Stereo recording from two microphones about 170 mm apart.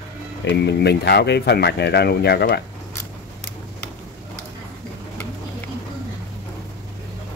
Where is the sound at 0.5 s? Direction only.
85° left.